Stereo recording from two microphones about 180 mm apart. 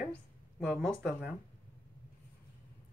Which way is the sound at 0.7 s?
Centre (ahead or behind).